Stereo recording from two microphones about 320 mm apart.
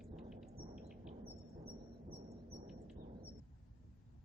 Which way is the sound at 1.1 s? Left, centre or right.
Centre.